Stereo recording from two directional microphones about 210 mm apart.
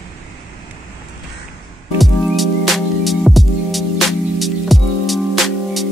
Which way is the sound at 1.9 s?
Centre (ahead or behind).